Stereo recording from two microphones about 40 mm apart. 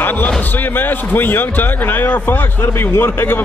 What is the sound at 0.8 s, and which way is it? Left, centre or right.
A man's voice, left.